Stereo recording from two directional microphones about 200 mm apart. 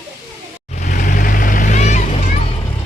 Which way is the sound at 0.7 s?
40° left (ahead or behind).